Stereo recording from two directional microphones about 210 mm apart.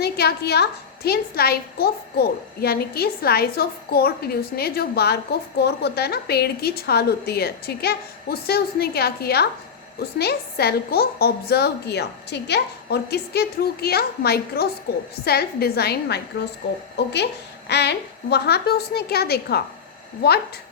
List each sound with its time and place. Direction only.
0.0 s a woman's voice: 50° left (ahead or behind)